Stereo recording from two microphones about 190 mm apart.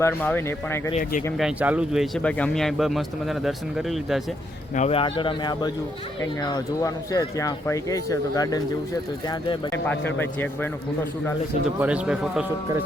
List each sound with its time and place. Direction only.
0.0 s a man's voice: 10° left (ahead or behind)
1.4 s speech: 5° right (ahead or behind)
4.7 s speech: 35° left (ahead or behind)
9.8 s a man's voice: 10° left (ahead or behind)
11.8 s speech: 5° right (ahead or behind)